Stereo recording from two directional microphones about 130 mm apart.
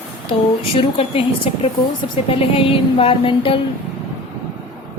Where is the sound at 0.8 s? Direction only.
45° left (ahead or behind).